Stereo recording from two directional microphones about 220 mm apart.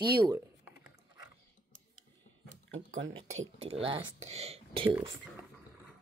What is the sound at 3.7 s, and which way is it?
Speech, 25° right (ahead or behind).